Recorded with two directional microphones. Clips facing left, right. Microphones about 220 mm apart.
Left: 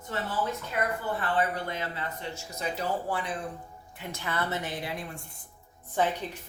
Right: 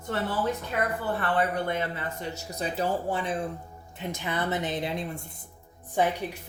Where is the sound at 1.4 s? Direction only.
55° right (ahead or behind); by 5.2 s 20° right (ahead or behind).